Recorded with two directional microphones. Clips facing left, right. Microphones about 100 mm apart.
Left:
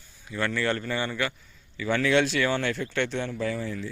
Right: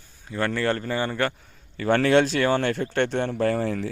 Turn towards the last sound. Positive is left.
turn(degrees=-65)  # may be behind; listen again after turning